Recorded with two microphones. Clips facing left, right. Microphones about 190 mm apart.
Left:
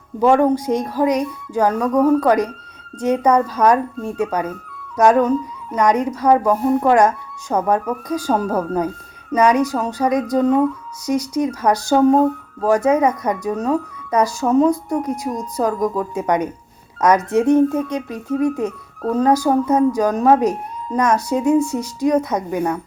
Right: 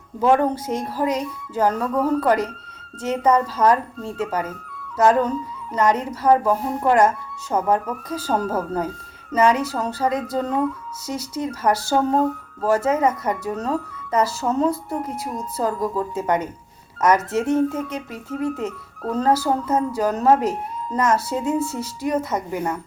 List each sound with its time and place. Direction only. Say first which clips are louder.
0.2 s speech: left 4 dB; 15° left (ahead or behind)
6.4 s speech: left 5 dB; 5° right (ahead or behind)
6.7 s speech: left 1 dB; 15° left (ahead or behind)
14.7 s a woman's voice: left 6 dB; 5° right (ahead or behind)
15.5 s speech: left 3 dB; 15° left (ahead or behind)